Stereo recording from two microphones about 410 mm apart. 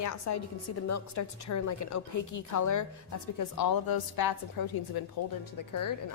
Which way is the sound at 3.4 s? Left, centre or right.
Left.